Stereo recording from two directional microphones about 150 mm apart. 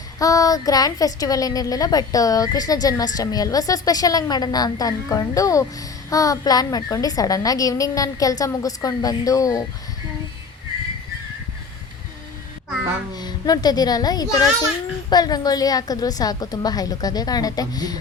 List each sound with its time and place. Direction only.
0.2 s a woman's voice: 25° left (ahead or behind)
13.1 s a woman's voice: 25° left (ahead or behind)